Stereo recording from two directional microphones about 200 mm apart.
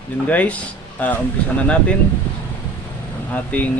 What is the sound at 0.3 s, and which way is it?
Speech, 10° left (ahead or behind).